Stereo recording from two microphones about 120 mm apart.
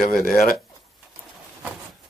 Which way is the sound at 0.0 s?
5° left (ahead or behind).